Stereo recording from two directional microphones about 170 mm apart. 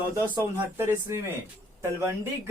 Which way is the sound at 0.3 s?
15° right (ahead or behind).